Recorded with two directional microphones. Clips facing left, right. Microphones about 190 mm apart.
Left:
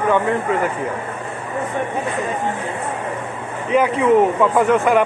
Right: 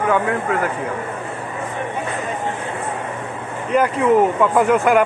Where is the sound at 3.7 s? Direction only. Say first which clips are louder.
Left 1 dB; centre (ahead or behind).